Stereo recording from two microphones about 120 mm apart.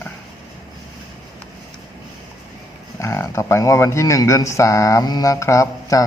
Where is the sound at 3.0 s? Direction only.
25° left (ahead or behind).